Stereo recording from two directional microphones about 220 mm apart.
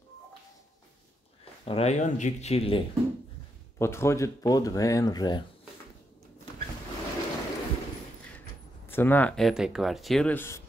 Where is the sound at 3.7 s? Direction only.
10° left (ahead or behind).